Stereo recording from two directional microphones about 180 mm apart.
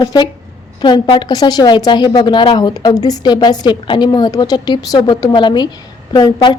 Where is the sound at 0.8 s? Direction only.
25° left (ahead or behind).